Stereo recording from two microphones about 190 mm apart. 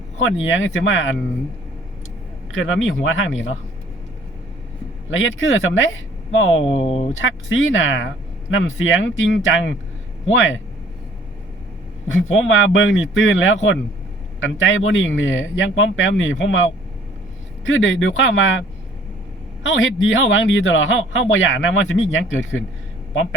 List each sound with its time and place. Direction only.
0.2 s speech: 90° left
2.5 s speech: 90° left
5.1 s speech: 90° left
6.7 s speech: 35° left (ahead or behind)
7.2 s speech: 90° left
12.0 s speech: 90° left
19.6 s speech: 90° left